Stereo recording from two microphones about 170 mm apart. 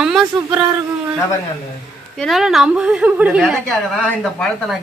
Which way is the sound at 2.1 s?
Centre (ahead or behind).